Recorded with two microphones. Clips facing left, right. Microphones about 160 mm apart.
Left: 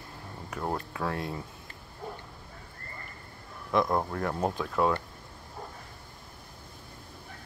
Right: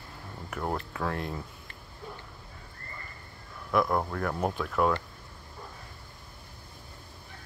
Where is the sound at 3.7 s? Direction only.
20° left (ahead or behind).